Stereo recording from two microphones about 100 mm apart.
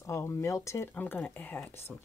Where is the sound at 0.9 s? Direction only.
15° left (ahead or behind).